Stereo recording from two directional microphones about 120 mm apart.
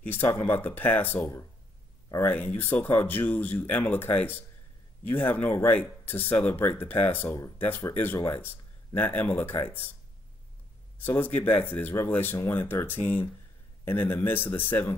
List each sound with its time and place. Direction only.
0.0 s speech: 15° left (ahead or behind)
11.1 s speech: 15° left (ahead or behind)